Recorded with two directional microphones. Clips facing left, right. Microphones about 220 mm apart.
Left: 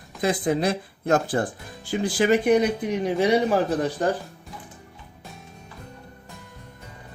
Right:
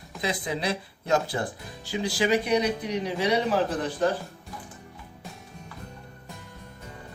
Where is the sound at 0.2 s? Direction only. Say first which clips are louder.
Left 7 dB; 50° left (ahead or behind).